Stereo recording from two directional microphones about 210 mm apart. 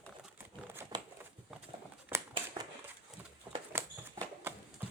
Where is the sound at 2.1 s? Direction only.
10° right (ahead or behind).